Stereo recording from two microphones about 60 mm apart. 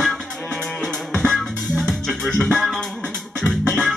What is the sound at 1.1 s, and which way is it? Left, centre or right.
Music, centre.